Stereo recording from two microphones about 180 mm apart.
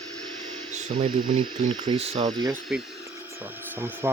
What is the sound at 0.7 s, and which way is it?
Speech, 40° right (ahead or behind).